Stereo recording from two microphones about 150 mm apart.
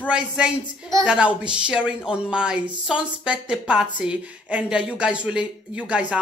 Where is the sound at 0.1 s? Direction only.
5° right (ahead or behind).